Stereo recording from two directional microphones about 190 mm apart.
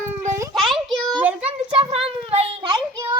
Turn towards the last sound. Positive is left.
turn(degrees=-25)  # may be behind; listen again after turning